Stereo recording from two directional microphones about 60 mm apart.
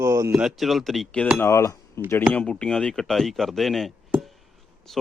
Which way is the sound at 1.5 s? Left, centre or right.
Left.